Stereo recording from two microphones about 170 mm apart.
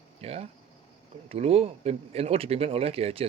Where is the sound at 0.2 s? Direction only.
40° right (ahead or behind).